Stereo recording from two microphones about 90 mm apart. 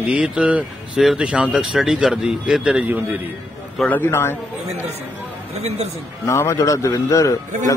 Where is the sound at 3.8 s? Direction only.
20° left (ahead or behind).